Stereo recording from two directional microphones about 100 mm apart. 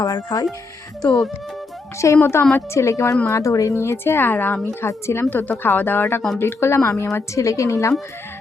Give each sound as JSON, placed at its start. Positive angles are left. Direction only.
{"t": 0.0, "sound": "speech", "side_deg": 40}
{"t": 1.0, "sound": "speech", "side_deg": 0}
{"t": 2.0, "sound": "a woman's voice", "side_deg": 30}